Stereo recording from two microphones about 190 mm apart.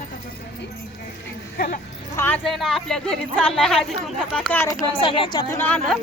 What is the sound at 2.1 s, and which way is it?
Speech, 10° left (ahead or behind).